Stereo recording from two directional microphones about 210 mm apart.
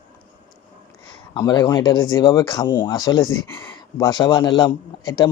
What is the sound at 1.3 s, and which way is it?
Speech, 20° left (ahead or behind).